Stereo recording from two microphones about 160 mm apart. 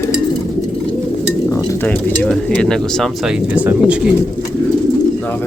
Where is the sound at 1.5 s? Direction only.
10° left (ahead or behind).